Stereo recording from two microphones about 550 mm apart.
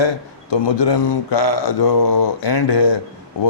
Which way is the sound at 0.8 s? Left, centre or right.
Left.